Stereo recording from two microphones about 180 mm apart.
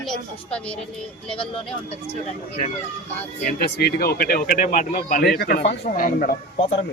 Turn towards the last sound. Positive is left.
turn(degrees=55)  # may be behind; listen again after turning